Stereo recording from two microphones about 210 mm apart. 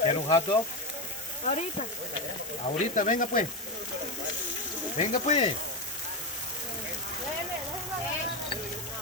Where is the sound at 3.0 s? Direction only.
40° left (ahead or behind).